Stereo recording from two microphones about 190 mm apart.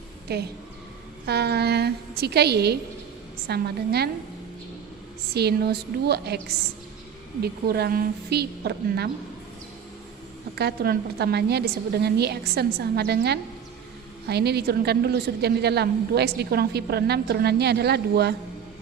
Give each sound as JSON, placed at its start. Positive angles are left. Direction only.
{"t": 0.3, "sound": "a woman's voice", "side_deg": -55}
{"t": 5.3, "sound": "a woman's voice", "side_deg": -60}
{"t": 7.4, "sound": "a woman's voice", "side_deg": -55}
{"t": 10.5, "sound": "a woman's voice", "side_deg": -60}